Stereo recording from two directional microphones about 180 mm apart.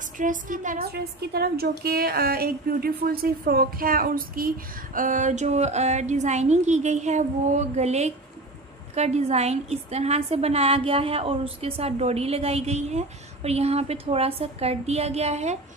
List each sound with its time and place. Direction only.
0.2 s a woman's voice: 45° right (ahead or behind)